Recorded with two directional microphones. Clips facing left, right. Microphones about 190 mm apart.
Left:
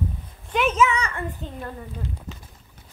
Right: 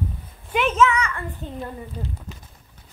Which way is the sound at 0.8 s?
30° left (ahead or behind).